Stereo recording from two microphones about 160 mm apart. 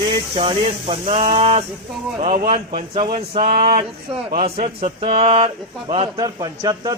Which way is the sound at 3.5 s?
75° right (ahead or behind).